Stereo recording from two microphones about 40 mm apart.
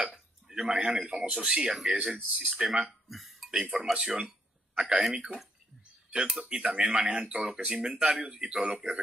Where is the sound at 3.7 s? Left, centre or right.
Centre.